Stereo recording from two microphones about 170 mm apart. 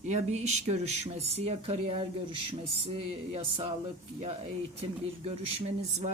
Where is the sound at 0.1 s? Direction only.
40° right (ahead or behind).